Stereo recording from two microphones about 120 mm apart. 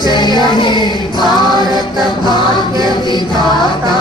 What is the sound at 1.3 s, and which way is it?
Music, 35° right (ahead or behind).